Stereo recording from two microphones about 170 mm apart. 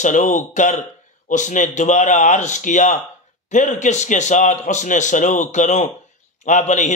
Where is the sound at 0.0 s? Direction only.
45° left (ahead or behind).